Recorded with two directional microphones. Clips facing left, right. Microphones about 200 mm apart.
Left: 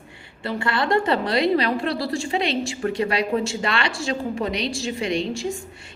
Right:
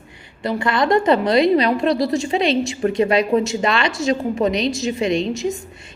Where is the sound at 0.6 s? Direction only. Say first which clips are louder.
Right 4 dB; 20° right (ahead or behind).